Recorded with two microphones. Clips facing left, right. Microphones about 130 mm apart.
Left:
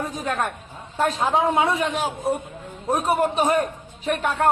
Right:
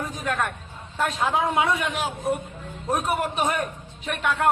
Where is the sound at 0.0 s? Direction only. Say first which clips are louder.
Left 2 dB; 30° left (ahead or behind).